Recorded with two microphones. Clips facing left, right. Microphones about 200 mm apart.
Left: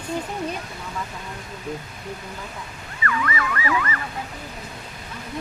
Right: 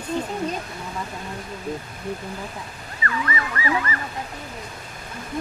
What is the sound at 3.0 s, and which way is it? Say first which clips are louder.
Ambulance: left 1 dB; 30° right (ahead or behind).